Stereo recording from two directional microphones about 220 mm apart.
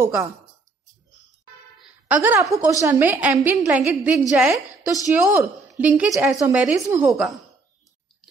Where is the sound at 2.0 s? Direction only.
10° right (ahead or behind).